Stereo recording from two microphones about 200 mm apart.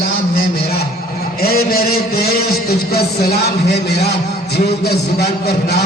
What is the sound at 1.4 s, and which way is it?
A man's voice, 50° left (ahead or behind).